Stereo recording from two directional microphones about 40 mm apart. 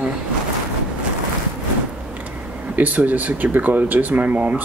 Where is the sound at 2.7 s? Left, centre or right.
Right.